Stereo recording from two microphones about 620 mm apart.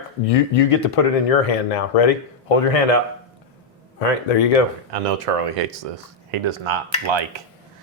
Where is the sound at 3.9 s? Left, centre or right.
Left.